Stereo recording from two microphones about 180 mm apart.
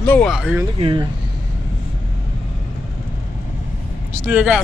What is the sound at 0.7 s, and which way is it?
Speech, 30° right (ahead or behind).